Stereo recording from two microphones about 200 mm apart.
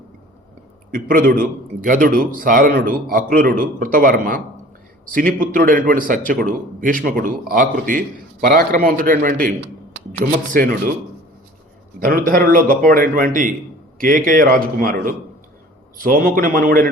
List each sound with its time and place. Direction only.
0.9 s a man's voice: 45° right (ahead or behind)
9.6 s a sound: 65° right (ahead or behind)
10.5 s a man's voice: 45° right (ahead or behind)
12.0 s a man's voice: 45° right (ahead or behind)